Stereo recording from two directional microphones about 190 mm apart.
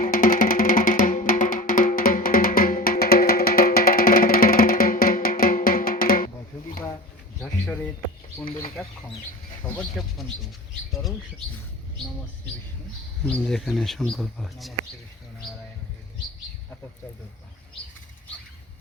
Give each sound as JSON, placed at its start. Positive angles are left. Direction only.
{"t": 0.0, "sound": "music", "side_deg": 45}
{"t": 8.8, "sound": "chicken", "side_deg": 0}
{"t": 9.6, "sound": "speech", "side_deg": 5}
{"t": 13.2, "sound": "speech", "side_deg": 5}